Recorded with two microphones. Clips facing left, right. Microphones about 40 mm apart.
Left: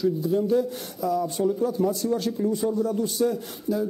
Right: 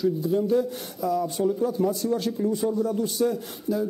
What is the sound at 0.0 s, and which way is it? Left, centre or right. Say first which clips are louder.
A man's voice: even; centre.